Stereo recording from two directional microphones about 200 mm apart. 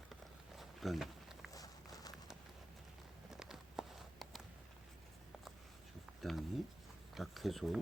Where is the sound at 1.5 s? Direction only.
20° left (ahead or behind).